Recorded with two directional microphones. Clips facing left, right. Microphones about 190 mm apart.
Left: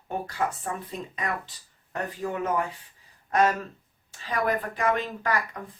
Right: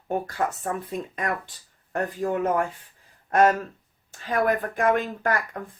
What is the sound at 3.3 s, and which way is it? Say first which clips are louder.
A woman's voice: right 4 dB; 50° right (ahead or behind).